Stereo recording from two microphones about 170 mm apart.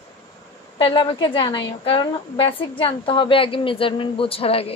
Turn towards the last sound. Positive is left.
turn(degrees=35)  # may be behind; listen again after turning